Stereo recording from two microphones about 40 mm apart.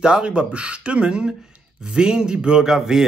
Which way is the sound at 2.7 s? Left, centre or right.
Centre.